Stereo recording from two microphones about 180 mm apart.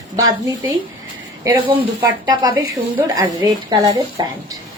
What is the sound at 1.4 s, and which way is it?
Speech, 20° right (ahead or behind).